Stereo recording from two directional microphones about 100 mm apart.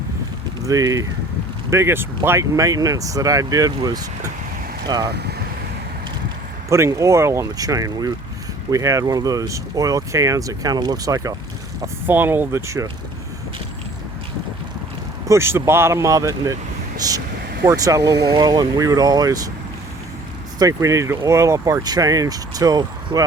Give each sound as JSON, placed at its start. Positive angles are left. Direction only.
{"t": 0.6, "sound": "speech", "side_deg": -35}
{"t": 1.7, "sound": "speech", "side_deg": -25}
{"t": 6.7, "sound": "speech", "side_deg": -30}
{"t": 12.0, "sound": "speech", "side_deg": -20}
{"t": 15.3, "sound": "speech", "side_deg": -25}
{"t": 20.6, "sound": "speech", "side_deg": -35}